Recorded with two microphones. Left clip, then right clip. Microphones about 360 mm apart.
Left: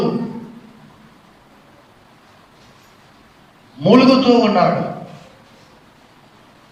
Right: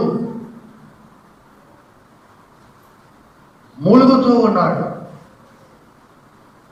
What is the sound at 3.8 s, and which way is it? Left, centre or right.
Speech, centre.